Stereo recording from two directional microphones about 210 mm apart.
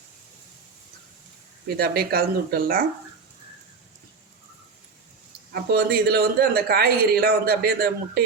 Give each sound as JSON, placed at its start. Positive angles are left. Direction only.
{"t": 1.7, "sound": "a man's voice", "side_deg": -50}
{"t": 5.7, "sound": "a man's voice", "side_deg": -50}